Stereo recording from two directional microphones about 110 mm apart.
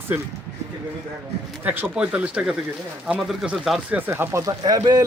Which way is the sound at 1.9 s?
10° right (ahead or behind).